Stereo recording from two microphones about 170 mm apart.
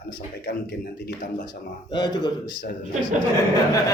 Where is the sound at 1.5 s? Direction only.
25° left (ahead or behind).